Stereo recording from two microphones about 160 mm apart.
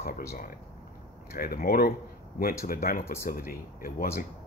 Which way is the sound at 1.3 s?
65° left (ahead or behind).